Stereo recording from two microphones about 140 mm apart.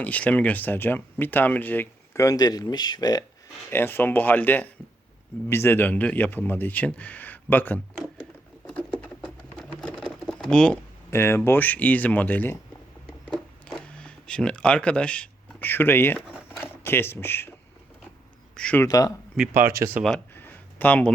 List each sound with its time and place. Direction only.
0.0 s speech: 10° left (ahead or behind); by 3.2 s 30° left (ahead or behind)
3.7 s speech: 15° left (ahead or behind)
9.0 s a sound: 5° left (ahead or behind)
11.1 s speech: 20° left (ahead or behind)
13.7 s camera: 5° left (ahead or behind)
16.1 s a sound: 10° right (ahead or behind)
16.8 s speech: 15° left (ahead or behind)
18.5 s speech: 10° left (ahead or behind)
18.9 s speech: 25° left (ahead or behind)
19.4 s speech: 15° right (ahead or behind)
20.1 s a sound: 15° left (ahead or behind)